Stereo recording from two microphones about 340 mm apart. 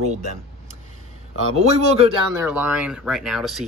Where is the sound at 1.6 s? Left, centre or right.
Centre.